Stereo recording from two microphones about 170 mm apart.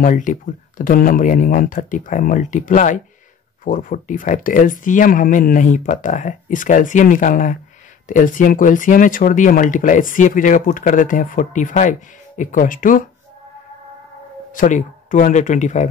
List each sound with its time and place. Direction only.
0.0 s speech: 50° left (ahead or behind)
14.5 s speech: 50° left (ahead or behind)